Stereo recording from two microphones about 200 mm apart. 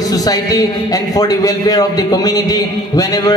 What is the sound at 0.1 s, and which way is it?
A man's voice, 20° left (ahead or behind).